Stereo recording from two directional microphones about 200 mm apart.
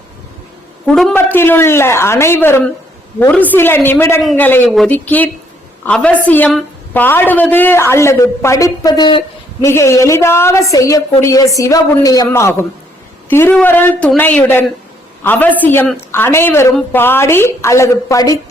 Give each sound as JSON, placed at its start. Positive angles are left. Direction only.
{"t": 0.9, "sound": "a woman's voice", "side_deg": 5}